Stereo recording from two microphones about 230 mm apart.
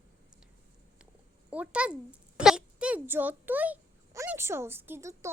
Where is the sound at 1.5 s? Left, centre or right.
Centre.